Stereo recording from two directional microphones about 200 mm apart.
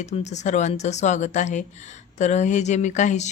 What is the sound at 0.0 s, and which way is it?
A woman's voice, 35° left (ahead or behind).